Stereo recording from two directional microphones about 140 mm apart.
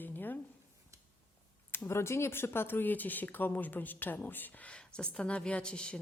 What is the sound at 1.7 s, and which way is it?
Speech, 15° left (ahead or behind).